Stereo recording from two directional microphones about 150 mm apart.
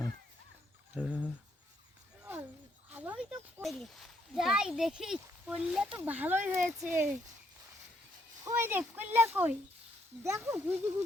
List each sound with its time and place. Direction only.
0.9 s speech: 10° right (ahead or behind)
2.9 s a sound: 10° right (ahead or behind)
3.6 s speech: centre (ahead or behind)
8.4 s speech: 15° right (ahead or behind)